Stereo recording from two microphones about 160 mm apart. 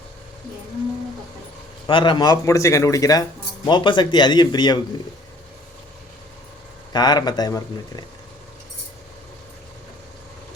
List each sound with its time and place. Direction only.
1.9 s a man's voice: 30° left (ahead or behind)
6.9 s a man's voice: 25° left (ahead or behind)